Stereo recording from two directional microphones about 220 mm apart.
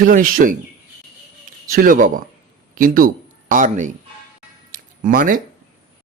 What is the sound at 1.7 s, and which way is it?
A man's voice, 40° right (ahead or behind).